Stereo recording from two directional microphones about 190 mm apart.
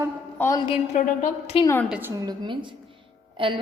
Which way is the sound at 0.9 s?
40° left (ahead or behind).